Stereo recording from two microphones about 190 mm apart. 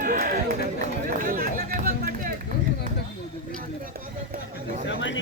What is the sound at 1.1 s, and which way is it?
Chatter, 45° right (ahead or behind).